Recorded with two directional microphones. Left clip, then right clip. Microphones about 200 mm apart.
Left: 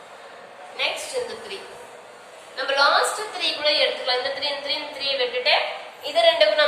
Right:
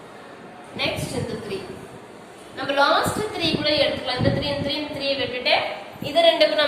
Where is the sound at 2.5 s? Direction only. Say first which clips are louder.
Even; 10° right (ahead or behind).